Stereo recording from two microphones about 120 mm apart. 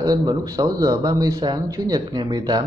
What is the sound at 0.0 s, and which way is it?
Speech, 35° right (ahead or behind).